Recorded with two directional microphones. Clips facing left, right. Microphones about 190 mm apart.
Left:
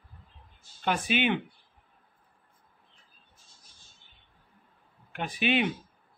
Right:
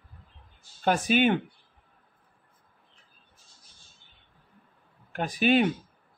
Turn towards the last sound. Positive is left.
turn(degrees=-40)  # may be behind; listen again after turning